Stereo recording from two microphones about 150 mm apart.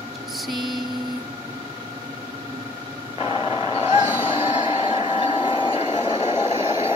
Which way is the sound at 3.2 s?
35° left (ahead or behind).